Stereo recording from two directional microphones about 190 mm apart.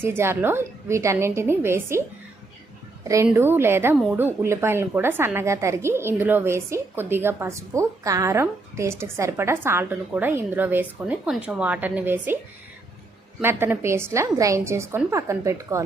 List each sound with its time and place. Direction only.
0.0 s a woman's voice: 10° right (ahead or behind)
13.4 s speech: 10° right (ahead or behind)